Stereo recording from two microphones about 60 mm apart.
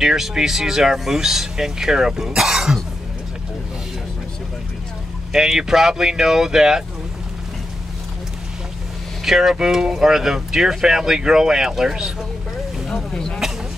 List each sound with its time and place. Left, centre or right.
0.0 s speech: centre
5.3 s speech: centre
9.2 s speech: centre
12.9 s speech: centre